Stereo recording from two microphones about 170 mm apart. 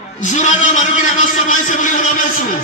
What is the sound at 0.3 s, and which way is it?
A man's voice, 45° left (ahead or behind).